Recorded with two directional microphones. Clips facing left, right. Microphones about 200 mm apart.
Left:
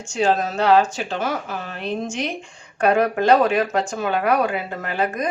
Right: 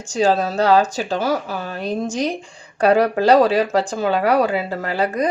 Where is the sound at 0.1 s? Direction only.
40° right (ahead or behind).